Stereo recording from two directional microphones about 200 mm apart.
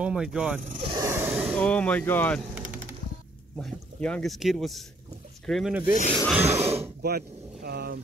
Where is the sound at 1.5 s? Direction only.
5° left (ahead or behind).